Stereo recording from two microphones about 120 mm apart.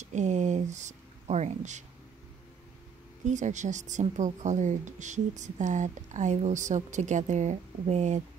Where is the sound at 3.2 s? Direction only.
85° right; by 8.2 s 70° right (ahead or behind).